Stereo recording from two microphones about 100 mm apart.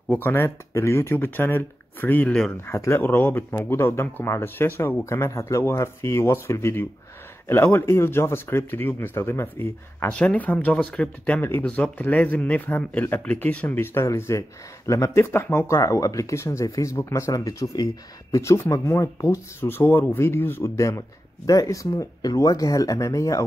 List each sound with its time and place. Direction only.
0.1 s speech: 20° left (ahead or behind)
10.0 s speech: 10° left (ahead or behind); by 23.4 s 30° left (ahead or behind)